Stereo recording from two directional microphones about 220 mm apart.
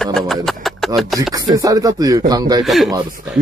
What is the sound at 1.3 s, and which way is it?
Speech, 15° right (ahead or behind).